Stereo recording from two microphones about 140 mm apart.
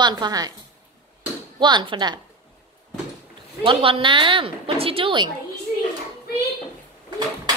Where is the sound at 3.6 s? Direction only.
40° right (ahead or behind).